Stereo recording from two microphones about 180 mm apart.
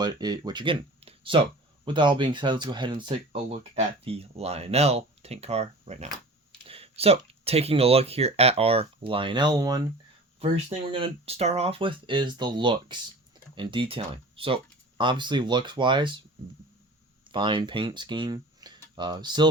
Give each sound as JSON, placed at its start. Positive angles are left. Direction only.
{"t": 0.0, "sound": "speech", "side_deg": -25}
{"t": 10.4, "sound": "speech", "side_deg": -30}
{"t": 17.2, "sound": "speech", "side_deg": -25}